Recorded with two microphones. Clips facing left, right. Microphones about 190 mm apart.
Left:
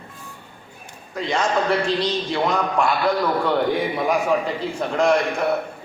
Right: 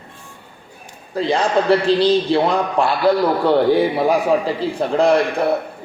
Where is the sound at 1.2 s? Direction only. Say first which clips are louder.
Right 4 dB; 35° right (ahead or behind).